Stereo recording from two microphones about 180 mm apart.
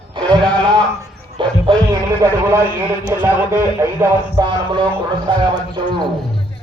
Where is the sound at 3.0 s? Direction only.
15° right (ahead or behind).